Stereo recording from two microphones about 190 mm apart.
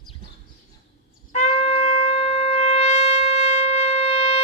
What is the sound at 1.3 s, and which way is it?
Wind instrument, 35° left (ahead or behind).